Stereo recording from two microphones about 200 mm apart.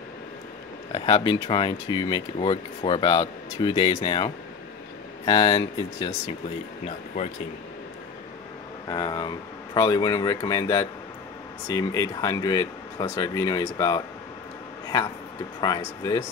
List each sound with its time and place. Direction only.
0.9 s speech: 25° left (ahead or behind)
8.8 s speech: 20° left (ahead or behind)
15.6 s speech: 20° left (ahead or behind)